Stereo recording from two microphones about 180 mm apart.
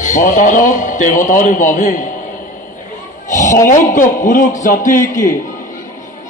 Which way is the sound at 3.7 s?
45° left (ahead or behind).